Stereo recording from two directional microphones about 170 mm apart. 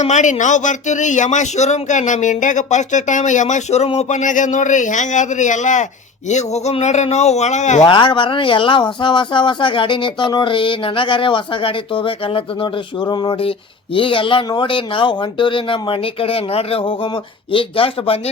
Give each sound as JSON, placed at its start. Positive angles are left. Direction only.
{"t": 0.0, "sound": "speech", "side_deg": 45}
{"t": 7.8, "sound": "speech", "side_deg": 30}